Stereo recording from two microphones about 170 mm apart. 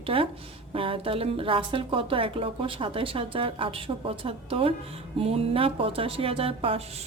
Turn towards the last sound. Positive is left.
turn(degrees=-35)  # may be behind; listen again after turning